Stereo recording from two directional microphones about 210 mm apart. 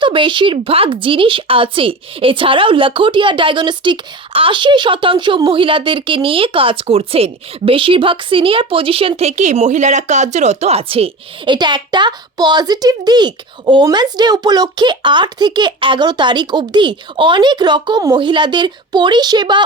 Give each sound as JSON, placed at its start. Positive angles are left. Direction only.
{"t": 0.0, "sound": "a woman's voice", "side_deg": -25}